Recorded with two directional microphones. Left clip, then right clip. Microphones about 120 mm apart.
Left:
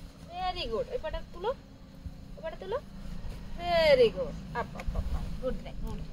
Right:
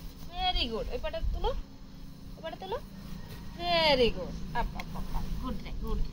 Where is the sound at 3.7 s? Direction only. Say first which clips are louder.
Left 3 dB; 55° left (ahead or behind).